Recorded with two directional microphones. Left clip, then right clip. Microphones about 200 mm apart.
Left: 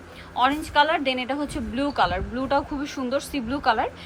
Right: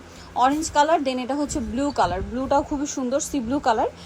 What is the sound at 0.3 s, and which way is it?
A woman's voice, 20° right (ahead or behind).